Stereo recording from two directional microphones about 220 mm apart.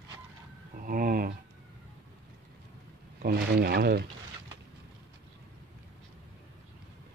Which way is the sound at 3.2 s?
45° right (ahead or behind).